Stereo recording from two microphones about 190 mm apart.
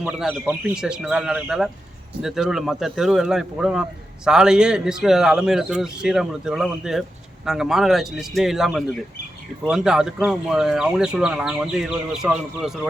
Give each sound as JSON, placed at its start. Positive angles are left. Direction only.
{"t": 0.0, "sound": "speech", "side_deg": -5}